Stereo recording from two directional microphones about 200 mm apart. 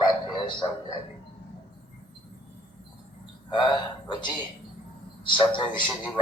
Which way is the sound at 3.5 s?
20° left (ahead or behind).